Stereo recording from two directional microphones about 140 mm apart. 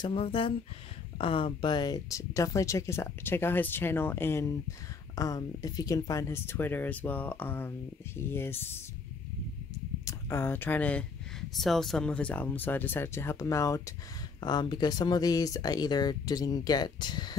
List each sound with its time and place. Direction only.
0.0 s speech: 40° left (ahead or behind); by 8.7 s 15° left (ahead or behind)
10.0 s speech: 15° left (ahead or behind)